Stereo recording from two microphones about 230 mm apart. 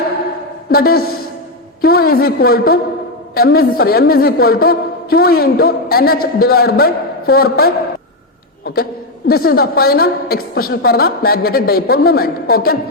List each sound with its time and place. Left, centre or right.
0.7 s a woman's voice: left